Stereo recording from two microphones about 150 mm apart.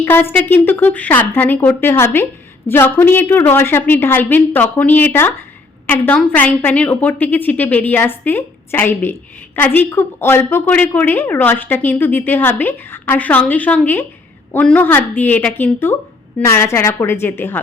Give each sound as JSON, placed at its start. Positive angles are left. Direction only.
{"t": 0.0, "sound": "a woman's voice", "side_deg": 15}